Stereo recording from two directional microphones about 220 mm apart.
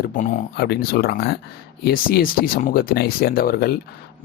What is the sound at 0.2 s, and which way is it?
Speech, 40° left (ahead or behind).